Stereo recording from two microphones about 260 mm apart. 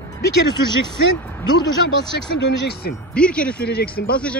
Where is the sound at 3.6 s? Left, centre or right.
Left.